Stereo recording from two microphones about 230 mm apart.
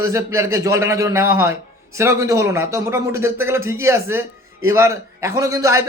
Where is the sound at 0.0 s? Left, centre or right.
Centre.